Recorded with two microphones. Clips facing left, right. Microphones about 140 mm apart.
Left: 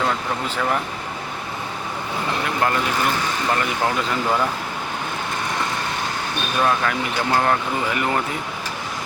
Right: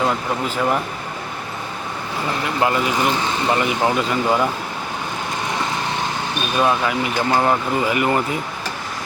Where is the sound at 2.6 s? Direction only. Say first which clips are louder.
Right 3 dB; 10° right (ahead or behind).